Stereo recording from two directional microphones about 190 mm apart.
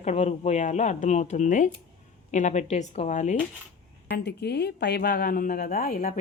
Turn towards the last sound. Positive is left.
turn(degrees=50)  # may be behind; listen again after turning